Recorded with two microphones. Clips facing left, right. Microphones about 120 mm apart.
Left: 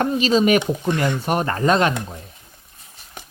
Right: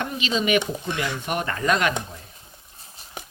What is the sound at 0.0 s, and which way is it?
Speech, 40° left (ahead or behind).